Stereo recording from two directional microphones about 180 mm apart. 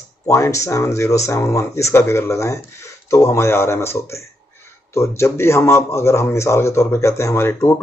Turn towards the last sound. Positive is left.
turn(degrees=15)  # may be behind; listen again after turning